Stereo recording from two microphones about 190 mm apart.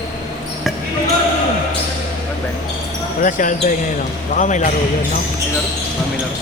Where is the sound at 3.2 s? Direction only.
45° left (ahead or behind).